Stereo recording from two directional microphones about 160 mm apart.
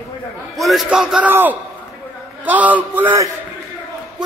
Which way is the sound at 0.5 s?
Centre (ahead or behind).